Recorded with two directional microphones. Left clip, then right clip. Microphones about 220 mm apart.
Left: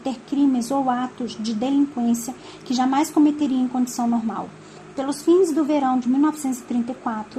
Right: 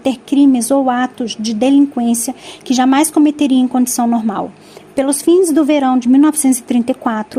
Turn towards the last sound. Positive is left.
turn(degrees=-45)  # may be behind; listen again after turning